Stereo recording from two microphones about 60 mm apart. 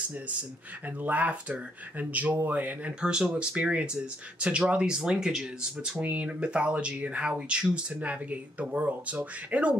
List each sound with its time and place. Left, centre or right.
0.3 s speech: right
3.0 s speech: centre
5.9 s speech: right